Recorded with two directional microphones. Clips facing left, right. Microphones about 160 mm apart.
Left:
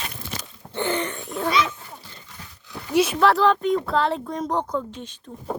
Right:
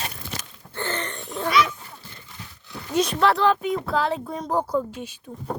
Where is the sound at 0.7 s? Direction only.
15° left (ahead or behind).